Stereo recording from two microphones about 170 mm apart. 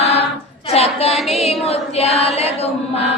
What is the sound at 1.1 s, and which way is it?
Music, centre (ahead or behind).